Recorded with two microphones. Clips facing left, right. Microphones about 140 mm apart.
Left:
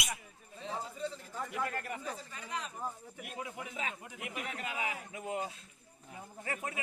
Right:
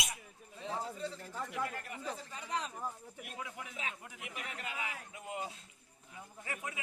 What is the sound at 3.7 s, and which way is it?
Speech, 60° left (ahead or behind).